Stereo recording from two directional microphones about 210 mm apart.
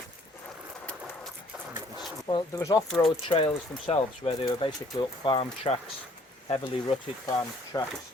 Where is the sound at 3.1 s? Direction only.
25° left (ahead or behind).